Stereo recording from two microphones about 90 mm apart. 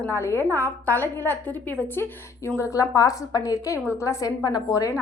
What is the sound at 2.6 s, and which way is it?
A woman's voice, 40° left (ahead or behind).